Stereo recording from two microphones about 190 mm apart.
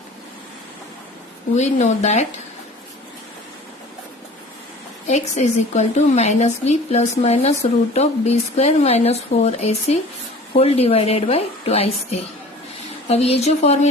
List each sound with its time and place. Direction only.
1.5 s a woman's voice: 35° left (ahead or behind)
5.0 s a woman's voice: 35° left (ahead or behind)